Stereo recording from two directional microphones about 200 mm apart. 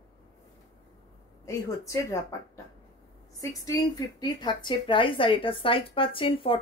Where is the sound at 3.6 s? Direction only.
20° left (ahead or behind).